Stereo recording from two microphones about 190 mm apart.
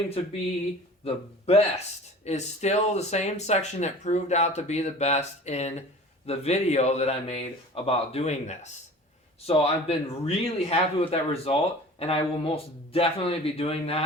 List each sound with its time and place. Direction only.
1.0 s speech: 30° left (ahead or behind)